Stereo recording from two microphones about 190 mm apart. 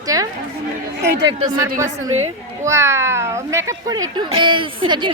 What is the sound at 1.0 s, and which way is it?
Speech, 60° right (ahead or behind).